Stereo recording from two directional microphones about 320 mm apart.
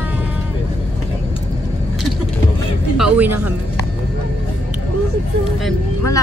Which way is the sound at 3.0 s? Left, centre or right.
Centre.